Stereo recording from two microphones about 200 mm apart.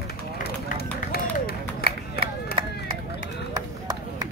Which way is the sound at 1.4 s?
50° left (ahead or behind).